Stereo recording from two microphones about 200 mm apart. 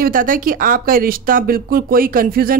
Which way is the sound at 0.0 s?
45° right (ahead or behind).